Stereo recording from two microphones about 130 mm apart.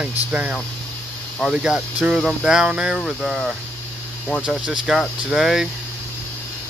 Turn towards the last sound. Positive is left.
turn(degrees=-5)  # may be behind; listen again after turning